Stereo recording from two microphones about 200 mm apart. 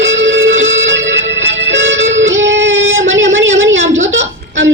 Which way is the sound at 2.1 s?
70° right (ahead or behind).